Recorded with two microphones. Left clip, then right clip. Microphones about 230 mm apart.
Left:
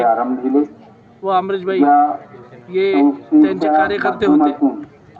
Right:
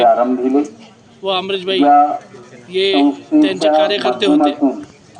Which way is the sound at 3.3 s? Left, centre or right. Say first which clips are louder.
Right 1 dB; right.